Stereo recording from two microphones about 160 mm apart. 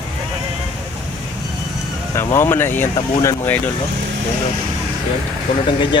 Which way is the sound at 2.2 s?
15° left (ahead or behind).